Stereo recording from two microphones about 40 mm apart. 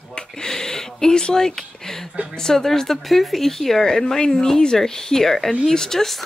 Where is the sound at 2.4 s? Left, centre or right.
Centre.